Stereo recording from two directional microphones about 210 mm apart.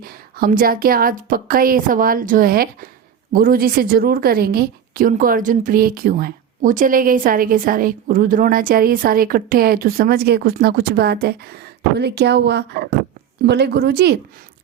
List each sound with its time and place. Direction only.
0.0 s a woman's voice: 45° right (ahead or behind)